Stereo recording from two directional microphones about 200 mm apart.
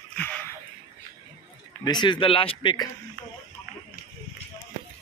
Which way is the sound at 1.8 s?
20° left (ahead or behind).